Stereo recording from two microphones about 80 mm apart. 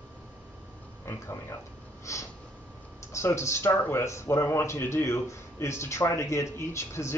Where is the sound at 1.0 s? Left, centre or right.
Left.